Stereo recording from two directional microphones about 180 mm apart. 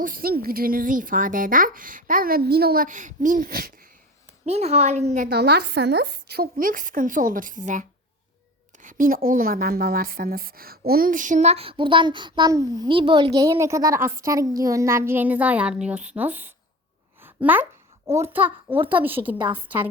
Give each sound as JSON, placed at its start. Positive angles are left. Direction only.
{"t": 0.0, "sound": "a woman's voice", "side_deg": -50}
{"t": 4.4, "sound": "a woman's voice", "side_deg": -35}
{"t": 5.3, "sound": "a woman's voice", "side_deg": -65}